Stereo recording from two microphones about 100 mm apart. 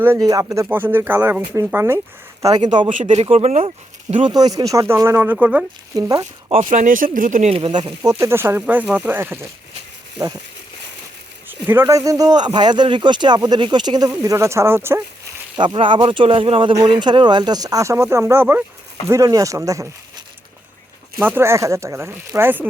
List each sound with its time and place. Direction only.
0.2 s speech: 35° right (ahead or behind)
2.4 s speech: 45° right (ahead or behind)
3.0 s speech: 85° right
4.3 s speech: 40° right (ahead or behind); by 5.6 s 15° right (ahead or behind)
5.9 s speech: 35° right (ahead or behind)
7.4 s speech: 70° right (ahead or behind)
7.7 s speech: 50° right (ahead or behind)
8.2 s speech: 25° right (ahead or behind)
10.2 s speech: 35° right (ahead or behind)
11.4 s speech: 20° right (ahead or behind)
11.9 s speech: 35° right (ahead or behind)
15.5 s speech: 55° right (ahead or behind); by 18.6 s 20° right (ahead or behind)
19.0 s speech: 30° right (ahead or behind)
21.2 s speech: 20° right (ahead or behind)